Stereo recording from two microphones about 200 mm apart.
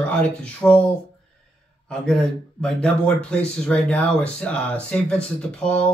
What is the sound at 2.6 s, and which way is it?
Speech, 5° left (ahead or behind).